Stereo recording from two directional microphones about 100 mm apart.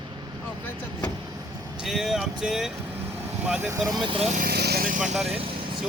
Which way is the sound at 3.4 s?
15° right (ahead or behind).